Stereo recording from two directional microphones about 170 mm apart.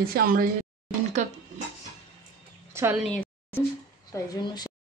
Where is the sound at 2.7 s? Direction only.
15° right (ahead or behind).